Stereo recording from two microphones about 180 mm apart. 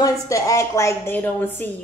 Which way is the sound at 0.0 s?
20° left (ahead or behind).